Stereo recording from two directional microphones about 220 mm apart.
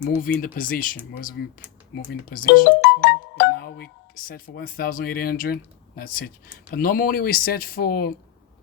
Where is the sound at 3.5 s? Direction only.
45° left (ahead or behind).